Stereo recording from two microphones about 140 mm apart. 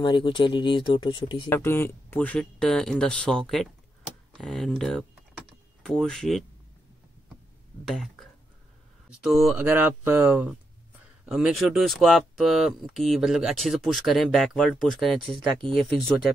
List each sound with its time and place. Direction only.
0.0 s speech: 35° left (ahead or behind)
1.5 s speech: 15° left (ahead or behind)
4.4 s typing: 5° left (ahead or behind)
7.9 s speech: centre (ahead or behind)
9.6 s speech: 15° right (ahead or behind)
11.2 s speech: centre (ahead or behind)